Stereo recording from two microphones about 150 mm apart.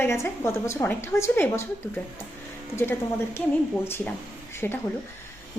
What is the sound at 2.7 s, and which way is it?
A woman's voice, 15° left (ahead or behind).